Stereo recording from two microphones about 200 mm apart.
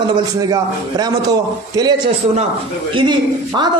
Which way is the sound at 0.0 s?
20° right (ahead or behind).